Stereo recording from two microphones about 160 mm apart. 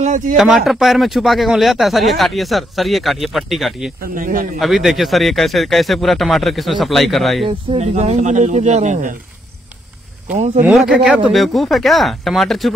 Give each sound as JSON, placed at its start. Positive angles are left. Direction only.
{"t": 0.0, "sound": "speech", "side_deg": -50}
{"t": 0.7, "sound": "speech", "side_deg": 0}
{"t": 4.0, "sound": "a man's voice", "side_deg": -60}
{"t": 4.6, "sound": "speech", "side_deg": 0}
{"t": 7.4, "sound": "speech", "side_deg": -35}
{"t": 7.9, "sound": "speech", "side_deg": -45}
{"t": 10.2, "sound": "speech", "side_deg": -50}
{"t": 10.7, "sound": "speech", "side_deg": -5}